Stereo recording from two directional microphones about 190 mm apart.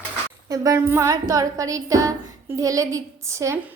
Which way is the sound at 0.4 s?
15° right (ahead or behind).